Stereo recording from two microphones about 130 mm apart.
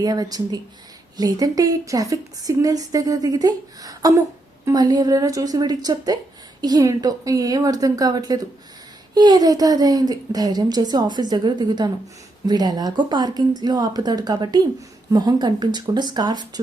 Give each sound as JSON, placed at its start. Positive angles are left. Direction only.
{"t": 0.0, "sound": "a woman's voice", "side_deg": -30}